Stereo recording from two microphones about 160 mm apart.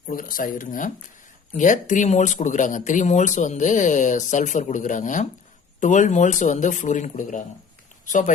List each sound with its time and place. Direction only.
0.1 s speech: 60° left (ahead or behind)